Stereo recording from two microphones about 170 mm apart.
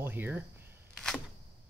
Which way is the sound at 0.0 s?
10° right (ahead or behind).